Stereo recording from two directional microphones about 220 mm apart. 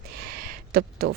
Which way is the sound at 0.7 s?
45° right (ahead or behind).